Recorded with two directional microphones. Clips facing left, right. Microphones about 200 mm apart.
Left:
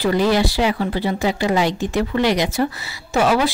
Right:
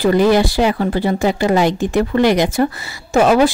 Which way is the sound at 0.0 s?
50° right (ahead or behind).